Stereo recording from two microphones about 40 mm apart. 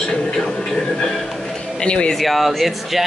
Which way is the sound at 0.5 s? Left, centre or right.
Centre.